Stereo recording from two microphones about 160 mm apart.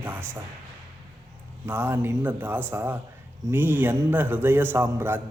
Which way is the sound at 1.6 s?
15° right (ahead or behind).